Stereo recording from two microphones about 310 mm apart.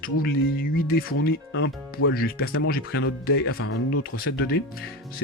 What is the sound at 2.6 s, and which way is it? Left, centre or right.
Speech, left.